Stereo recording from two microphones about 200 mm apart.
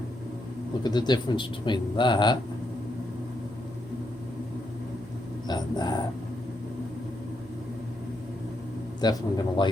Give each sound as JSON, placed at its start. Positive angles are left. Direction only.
{"t": 0.8, "sound": "speech", "side_deg": 20}
{"t": 5.5, "sound": "speech", "side_deg": 20}
{"t": 9.0, "sound": "speech", "side_deg": 20}